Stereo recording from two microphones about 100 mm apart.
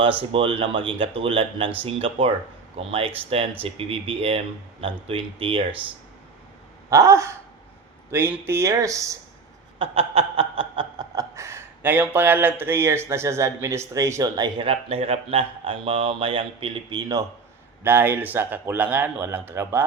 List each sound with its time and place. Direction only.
0.0 s speech: 60° right (ahead or behind)
2.7 s speech: 70° right (ahead or behind)
6.9 s speech: 30° right (ahead or behind)
9.7 s snicker: 65° right (ahead or behind)
10.9 s speech: 40° right (ahead or behind)
14.3 s speech: 45° right (ahead or behind)
14.7 s speech: 75° right (ahead or behind); by 17.2 s 40° right (ahead or behind)
17.8 s speech: 20° right (ahead or behind)